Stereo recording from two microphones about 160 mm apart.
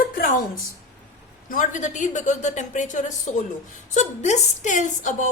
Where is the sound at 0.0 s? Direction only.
60° left (ahead or behind).